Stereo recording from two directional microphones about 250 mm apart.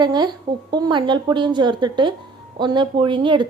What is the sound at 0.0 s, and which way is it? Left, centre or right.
Speech, centre.